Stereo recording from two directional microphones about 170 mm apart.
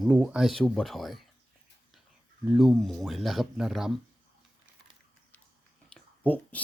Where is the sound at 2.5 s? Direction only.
Centre (ahead or behind).